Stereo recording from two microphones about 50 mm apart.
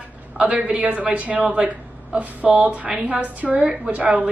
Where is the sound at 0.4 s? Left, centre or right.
Right.